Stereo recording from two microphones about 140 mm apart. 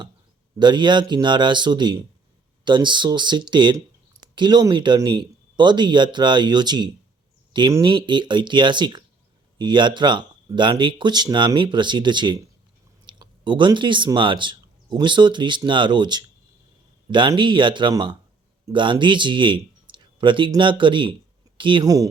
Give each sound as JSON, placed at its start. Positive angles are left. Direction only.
{"t": 0.6, "sound": "speech", "side_deg": -30}
{"t": 21.8, "sound": "speech", "side_deg": -25}